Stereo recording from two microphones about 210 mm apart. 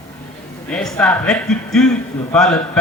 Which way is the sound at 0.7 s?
5° left (ahead or behind).